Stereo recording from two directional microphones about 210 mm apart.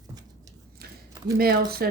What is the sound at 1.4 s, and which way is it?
Speech, 45° right (ahead or behind).